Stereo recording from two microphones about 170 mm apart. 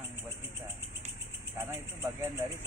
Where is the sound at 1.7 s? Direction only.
10° right (ahead or behind).